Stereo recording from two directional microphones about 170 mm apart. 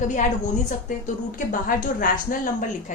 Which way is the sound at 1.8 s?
55° left (ahead or behind).